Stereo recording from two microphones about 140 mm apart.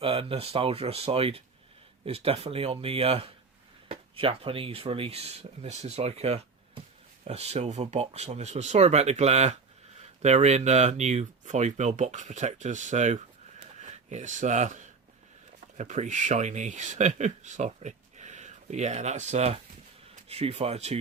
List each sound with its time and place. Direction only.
0.0 s speech: 40° right (ahead or behind)